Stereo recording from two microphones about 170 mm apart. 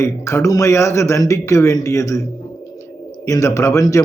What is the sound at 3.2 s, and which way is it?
Speech, 20° left (ahead or behind).